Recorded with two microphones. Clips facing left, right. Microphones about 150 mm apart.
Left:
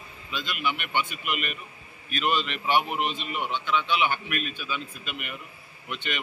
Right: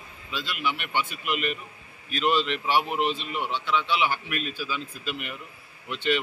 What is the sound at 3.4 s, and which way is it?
A man's voice, 30° right (ahead or behind).